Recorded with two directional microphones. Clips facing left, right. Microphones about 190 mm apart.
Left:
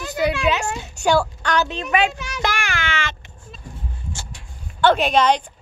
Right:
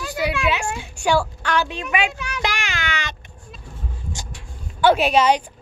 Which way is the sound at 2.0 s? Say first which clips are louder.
Left 3 dB; 15° right (ahead or behind).